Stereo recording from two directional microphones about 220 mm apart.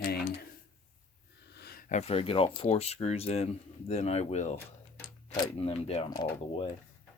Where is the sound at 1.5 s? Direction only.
45° left (ahead or behind).